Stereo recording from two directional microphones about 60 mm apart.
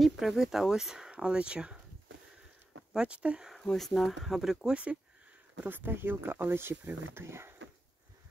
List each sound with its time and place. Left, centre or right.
0.0 s speech: centre
2.9 s speech: centre
3.6 s speech: centre
5.6 s speech: right